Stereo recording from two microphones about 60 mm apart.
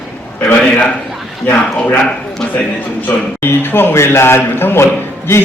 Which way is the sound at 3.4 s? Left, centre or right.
Left.